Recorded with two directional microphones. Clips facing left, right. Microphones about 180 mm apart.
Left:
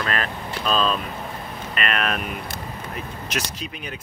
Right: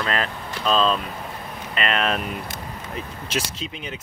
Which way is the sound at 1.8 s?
25° right (ahead or behind).